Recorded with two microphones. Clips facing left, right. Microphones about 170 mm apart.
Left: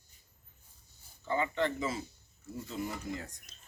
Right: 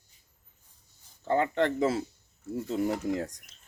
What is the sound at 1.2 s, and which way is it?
Speech, 65° right (ahead or behind).